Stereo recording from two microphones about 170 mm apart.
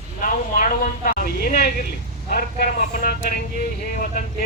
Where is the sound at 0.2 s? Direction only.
55° left (ahead or behind).